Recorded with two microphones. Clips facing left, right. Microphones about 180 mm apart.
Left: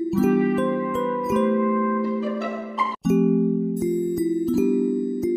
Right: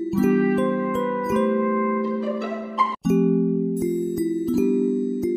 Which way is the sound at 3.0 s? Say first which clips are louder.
Even; centre (ahead or behind).